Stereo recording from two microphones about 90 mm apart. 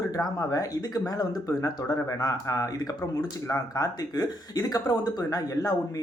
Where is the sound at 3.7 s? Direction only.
45° left (ahead or behind).